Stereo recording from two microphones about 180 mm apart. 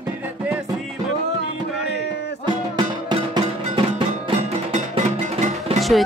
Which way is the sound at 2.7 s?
25° right (ahead or behind).